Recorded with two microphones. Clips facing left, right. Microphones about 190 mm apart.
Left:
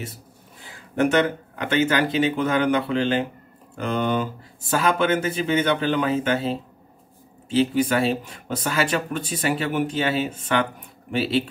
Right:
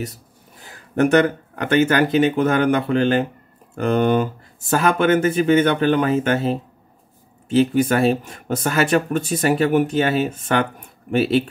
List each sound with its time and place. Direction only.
0.7 s speech: 45° right (ahead or behind)